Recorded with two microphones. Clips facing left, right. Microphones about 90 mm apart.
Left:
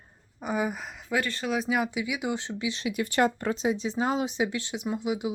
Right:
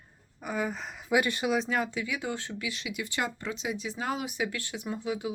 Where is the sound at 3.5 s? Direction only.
35° left (ahead or behind).